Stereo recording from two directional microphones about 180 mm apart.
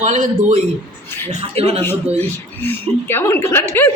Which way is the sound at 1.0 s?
10° left (ahead or behind).